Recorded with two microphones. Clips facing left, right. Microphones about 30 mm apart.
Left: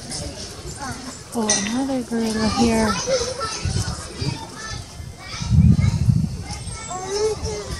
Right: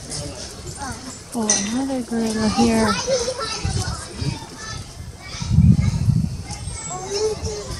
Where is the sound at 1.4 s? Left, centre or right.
Left.